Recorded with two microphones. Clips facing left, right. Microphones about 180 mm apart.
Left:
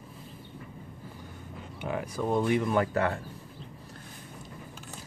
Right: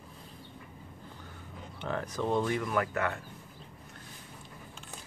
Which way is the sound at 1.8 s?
10° left (ahead or behind).